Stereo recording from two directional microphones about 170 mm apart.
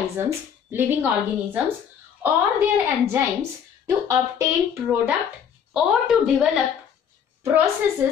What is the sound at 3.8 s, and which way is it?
Speech, 15° right (ahead or behind).